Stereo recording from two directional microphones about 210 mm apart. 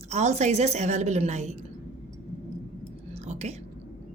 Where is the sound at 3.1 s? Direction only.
30° right (ahead or behind).